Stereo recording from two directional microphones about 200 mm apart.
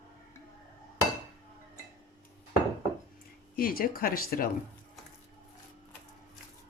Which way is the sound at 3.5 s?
45° left (ahead or behind).